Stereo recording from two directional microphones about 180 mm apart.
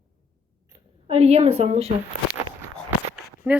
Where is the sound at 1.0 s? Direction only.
35° right (ahead or behind).